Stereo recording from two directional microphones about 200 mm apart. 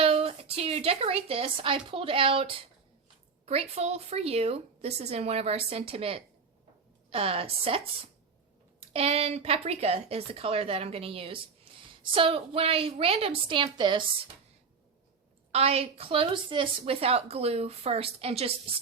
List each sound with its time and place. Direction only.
0.0 s a woman's voice: 30° right (ahead or behind)
15.5 s a woman's voice: 30° right (ahead or behind)